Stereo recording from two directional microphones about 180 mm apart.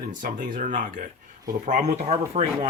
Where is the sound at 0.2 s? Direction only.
45° right (ahead or behind).